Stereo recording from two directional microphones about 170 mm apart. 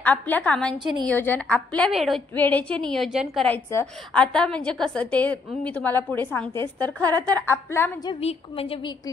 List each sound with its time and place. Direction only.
0.0 s a woman's voice: 10° left (ahead or behind)
2.3 s a woman's voice: 10° left (ahead or behind)
3.4 s a woman's voice: 10° left (ahead or behind)
8.0 s a woman's voice: 30° left (ahead or behind)